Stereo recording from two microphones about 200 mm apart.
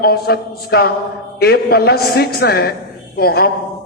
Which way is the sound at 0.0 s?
50° left (ahead or behind).